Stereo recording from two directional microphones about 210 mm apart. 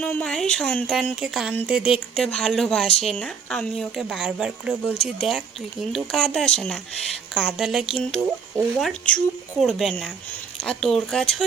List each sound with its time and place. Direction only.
0.0 s a woman's voice: 5° left (ahead or behind)